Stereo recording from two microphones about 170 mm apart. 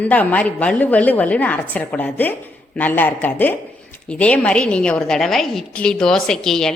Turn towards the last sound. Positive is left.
turn(degrees=5)  # may be behind; listen again after turning